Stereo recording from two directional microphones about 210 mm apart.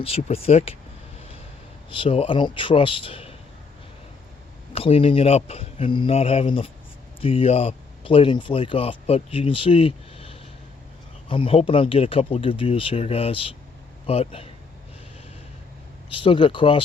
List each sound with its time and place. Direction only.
0.0 s speech: 30° left (ahead or behind)
1.9 s speech: 25° left (ahead or behind)
4.7 s speech: 25° left (ahead or behind)
16.1 s speech: 25° left (ahead or behind)